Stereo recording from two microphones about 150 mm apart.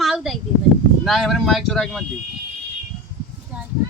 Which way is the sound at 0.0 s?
Centre (ahead or behind).